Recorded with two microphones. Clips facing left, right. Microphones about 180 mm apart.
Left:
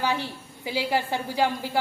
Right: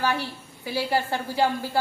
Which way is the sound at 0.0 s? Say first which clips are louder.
Right 1 dB; 15° left (ahead or behind).